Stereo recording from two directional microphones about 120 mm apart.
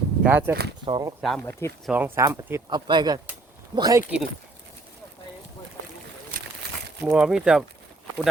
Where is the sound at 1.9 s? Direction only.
20° right (ahead or behind).